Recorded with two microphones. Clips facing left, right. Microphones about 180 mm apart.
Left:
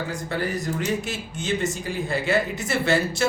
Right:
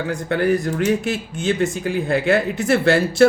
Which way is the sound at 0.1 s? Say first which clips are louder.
Right 8 dB; 60° right (ahead or behind).